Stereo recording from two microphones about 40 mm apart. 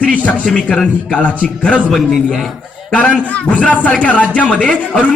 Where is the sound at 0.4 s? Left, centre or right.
Left.